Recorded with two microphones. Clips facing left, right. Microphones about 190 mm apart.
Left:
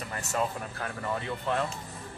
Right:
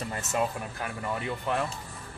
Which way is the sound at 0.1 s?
20° right (ahead or behind).